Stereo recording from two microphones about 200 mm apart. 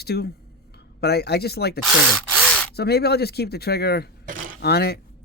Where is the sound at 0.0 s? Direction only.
50° left (ahead or behind).